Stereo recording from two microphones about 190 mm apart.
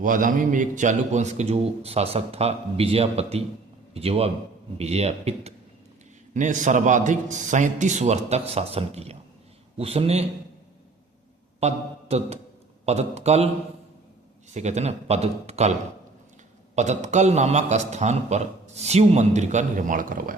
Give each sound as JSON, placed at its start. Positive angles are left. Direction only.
{"t": 0.0, "sound": "a man's voice", "side_deg": -45}
{"t": 11.6, "sound": "speech", "side_deg": -35}
{"t": 14.5, "sound": "a man's voice", "side_deg": -35}
{"t": 16.7, "sound": "a man's voice", "side_deg": -35}